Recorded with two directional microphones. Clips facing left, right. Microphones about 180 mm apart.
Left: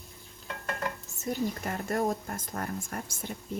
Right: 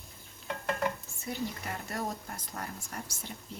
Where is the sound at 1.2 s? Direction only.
45° left (ahead or behind).